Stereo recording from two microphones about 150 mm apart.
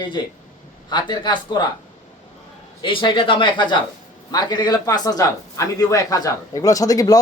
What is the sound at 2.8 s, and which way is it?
A man's voice, 35° left (ahead or behind).